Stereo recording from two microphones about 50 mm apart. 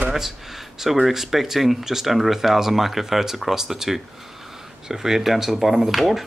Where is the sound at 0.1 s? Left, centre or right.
Centre.